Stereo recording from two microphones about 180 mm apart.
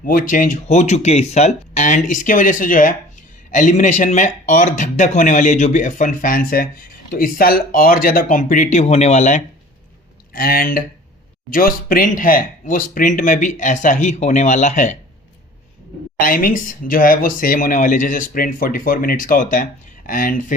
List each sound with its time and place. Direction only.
0.0 s speech: 50° left (ahead or behind)
10.3 s speech: 55° left (ahead or behind)
16.1 s speech: 50° left (ahead or behind)